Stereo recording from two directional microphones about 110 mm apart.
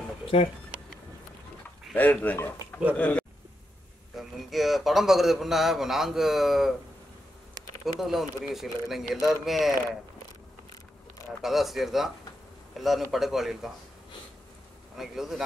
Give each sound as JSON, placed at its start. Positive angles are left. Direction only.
{"t": 0.3, "sound": "speech", "side_deg": 65}
{"t": 2.0, "sound": "speech", "side_deg": 15}
{"t": 4.2, "sound": "a man's voice", "side_deg": 0}
{"t": 7.8, "sound": "a man's voice", "side_deg": 0}
{"t": 11.4, "sound": "a man's voice", "side_deg": 0}
{"t": 15.0, "sound": "a man's voice", "side_deg": -5}